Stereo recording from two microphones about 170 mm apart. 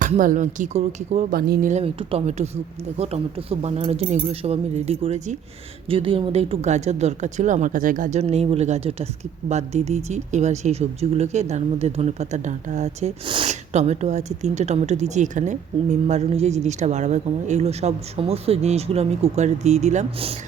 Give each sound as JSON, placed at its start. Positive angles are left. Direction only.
{"t": 0.0, "sound": "speech", "side_deg": -50}
{"t": 1.3, "sound": "speech", "side_deg": -60}
{"t": 1.7, "sound": "speech", "side_deg": -35}
{"t": 13.5, "sound": "speech", "side_deg": -40}